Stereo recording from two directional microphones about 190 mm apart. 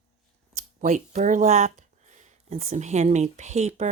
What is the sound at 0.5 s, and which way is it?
Speech, 35° right (ahead or behind).